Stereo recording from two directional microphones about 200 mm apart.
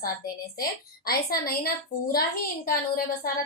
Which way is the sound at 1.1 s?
50° left (ahead or behind).